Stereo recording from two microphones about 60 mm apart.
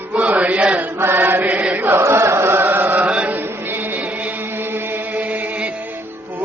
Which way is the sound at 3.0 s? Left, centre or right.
Right.